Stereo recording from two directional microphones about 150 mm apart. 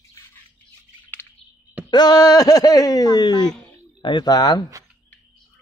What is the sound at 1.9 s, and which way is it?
Speech, 25° left (ahead or behind).